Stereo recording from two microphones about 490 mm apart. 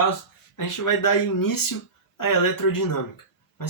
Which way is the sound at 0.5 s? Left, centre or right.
Left.